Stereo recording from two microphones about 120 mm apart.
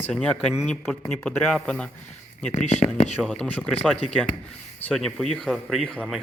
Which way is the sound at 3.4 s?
10° left (ahead or behind).